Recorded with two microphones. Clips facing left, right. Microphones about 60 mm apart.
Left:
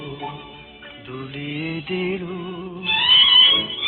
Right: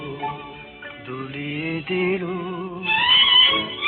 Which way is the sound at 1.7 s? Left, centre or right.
Right.